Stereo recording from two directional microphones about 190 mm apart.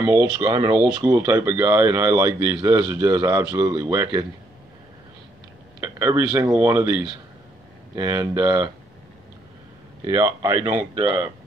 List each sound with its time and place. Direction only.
0.0 s speech: 15° right (ahead or behind)
5.8 s speech: 10° right (ahead or behind)
10.0 s speech: 20° right (ahead or behind)
10.7 s speech: 35° right (ahead or behind)